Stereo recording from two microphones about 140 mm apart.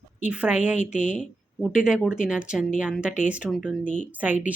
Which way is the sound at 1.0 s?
60° left (ahead or behind).